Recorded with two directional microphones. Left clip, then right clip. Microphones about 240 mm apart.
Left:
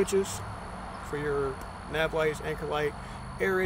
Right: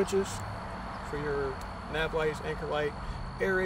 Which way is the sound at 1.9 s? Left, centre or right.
Left.